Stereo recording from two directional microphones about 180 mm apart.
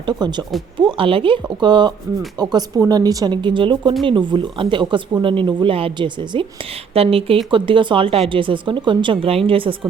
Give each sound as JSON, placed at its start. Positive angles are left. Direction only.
{"t": 0.0, "sound": "speech", "side_deg": -25}